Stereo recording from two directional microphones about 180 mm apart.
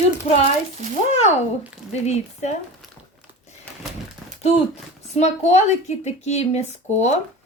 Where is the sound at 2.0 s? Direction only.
40° left (ahead or behind).